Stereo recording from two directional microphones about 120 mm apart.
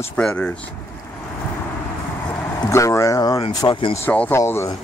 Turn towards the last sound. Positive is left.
turn(degrees=20)  # may be behind; listen again after turning